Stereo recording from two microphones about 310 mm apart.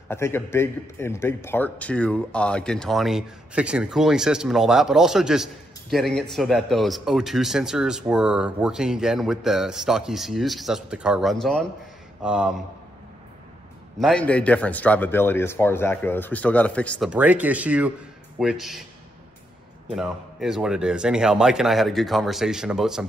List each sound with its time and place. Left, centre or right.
0.1 s speech: centre
13.9 s speech: centre
20.0 s speech: centre